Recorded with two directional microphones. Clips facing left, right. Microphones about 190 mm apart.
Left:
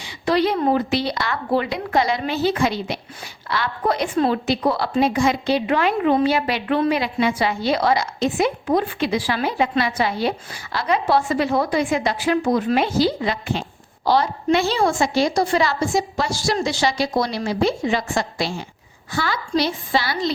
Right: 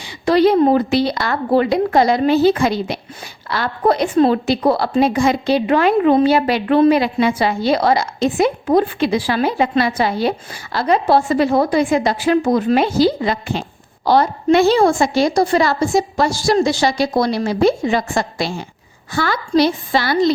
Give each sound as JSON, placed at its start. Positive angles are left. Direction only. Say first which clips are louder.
{"t": 0.0, "sound": "a woman's voice", "louder": "right 6 dB", "side_deg": -35}